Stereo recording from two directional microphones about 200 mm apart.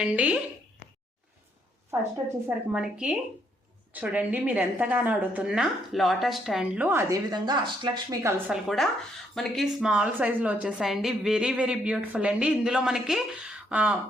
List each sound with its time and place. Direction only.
0.0 s a woman's voice: 5° right (ahead or behind)
2.7 s a woman's voice: 5° right (ahead or behind)